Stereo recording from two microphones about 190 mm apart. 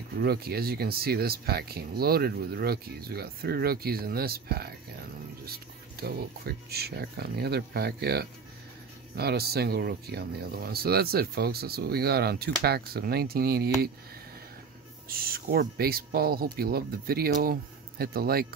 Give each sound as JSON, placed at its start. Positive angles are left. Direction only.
{"t": 0.2, "sound": "speech", "side_deg": -55}
{"t": 15.0, "sound": "speech", "side_deg": -50}